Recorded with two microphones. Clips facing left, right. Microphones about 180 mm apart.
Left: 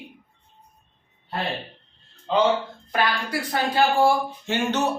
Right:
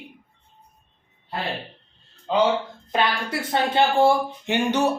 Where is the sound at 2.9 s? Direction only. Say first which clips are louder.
Right 1 dB; 25° right (ahead or behind).